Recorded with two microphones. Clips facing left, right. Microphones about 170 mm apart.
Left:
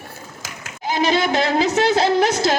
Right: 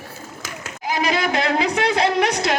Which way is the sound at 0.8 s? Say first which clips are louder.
Left 3 dB; 30° left (ahead or behind).